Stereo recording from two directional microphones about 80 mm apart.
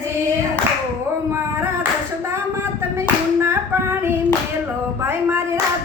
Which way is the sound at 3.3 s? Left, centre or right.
Right.